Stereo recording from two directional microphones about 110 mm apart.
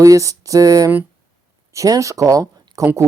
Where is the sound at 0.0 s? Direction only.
30° right (ahead or behind).